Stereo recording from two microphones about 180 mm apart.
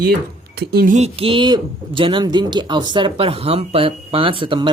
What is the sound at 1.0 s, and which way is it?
Speech, 30° right (ahead or behind).